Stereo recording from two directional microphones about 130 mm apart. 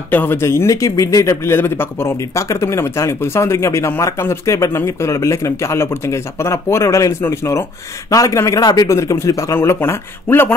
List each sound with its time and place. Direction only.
0.1 s speech: 15° left (ahead or behind)